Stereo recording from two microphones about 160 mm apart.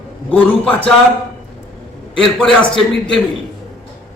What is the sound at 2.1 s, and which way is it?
A man's voice, 5° left (ahead or behind).